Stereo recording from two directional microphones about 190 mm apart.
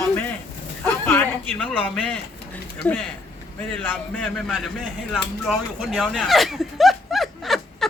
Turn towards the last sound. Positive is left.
turn(degrees=0)  # may be behind; listen again after turning